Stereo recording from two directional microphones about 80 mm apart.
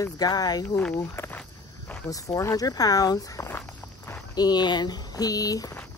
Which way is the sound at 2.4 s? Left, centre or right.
Left.